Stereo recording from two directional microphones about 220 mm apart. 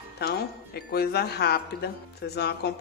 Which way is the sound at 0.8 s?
45° left (ahead or behind).